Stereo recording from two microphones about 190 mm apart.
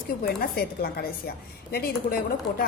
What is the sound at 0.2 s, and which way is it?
A woman's voice, 55° left (ahead or behind).